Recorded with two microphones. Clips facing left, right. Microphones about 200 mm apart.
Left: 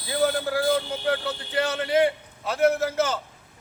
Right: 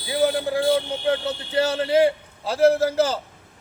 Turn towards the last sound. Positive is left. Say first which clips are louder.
# right 4 dB
turn(degrees=-30)  # may be behind; listen again after turning